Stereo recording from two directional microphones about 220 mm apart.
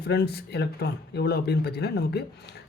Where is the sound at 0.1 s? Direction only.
45° left (ahead or behind).